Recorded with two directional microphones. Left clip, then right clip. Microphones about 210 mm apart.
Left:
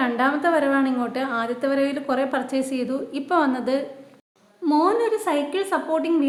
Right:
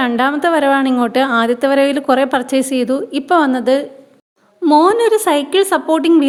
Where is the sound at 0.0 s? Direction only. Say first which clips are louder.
Right 6 dB; 45° right (ahead or behind).